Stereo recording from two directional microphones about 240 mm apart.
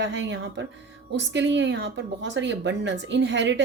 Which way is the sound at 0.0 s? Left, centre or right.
Right.